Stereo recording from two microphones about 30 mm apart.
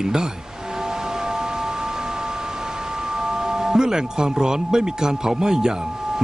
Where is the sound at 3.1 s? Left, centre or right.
Centre.